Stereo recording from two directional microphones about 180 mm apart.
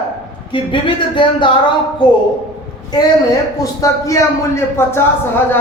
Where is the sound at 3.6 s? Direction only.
20° left (ahead or behind).